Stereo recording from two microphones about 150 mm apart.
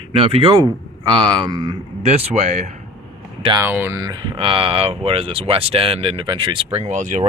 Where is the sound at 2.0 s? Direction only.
45° right (ahead or behind).